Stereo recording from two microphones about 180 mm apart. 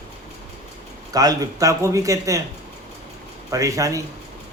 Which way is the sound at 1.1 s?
20° right (ahead or behind).